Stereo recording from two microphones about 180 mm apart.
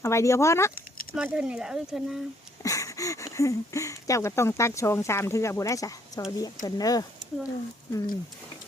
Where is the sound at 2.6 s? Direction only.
20° left (ahead or behind).